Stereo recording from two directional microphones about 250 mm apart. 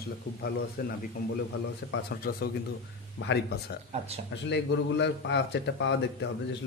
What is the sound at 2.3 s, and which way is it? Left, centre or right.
Speech, left.